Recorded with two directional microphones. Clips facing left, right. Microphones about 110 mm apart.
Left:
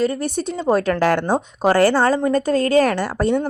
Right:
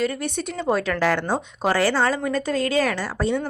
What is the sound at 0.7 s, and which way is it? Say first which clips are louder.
Speech: left 4 dB; 45° left (ahead or behind).